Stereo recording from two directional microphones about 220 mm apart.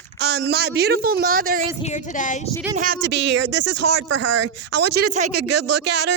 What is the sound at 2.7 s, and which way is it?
A woman's voice, 40° right (ahead or behind).